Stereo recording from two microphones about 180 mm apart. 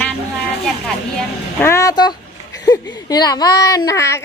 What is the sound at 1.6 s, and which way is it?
Speech, 15° left (ahead or behind).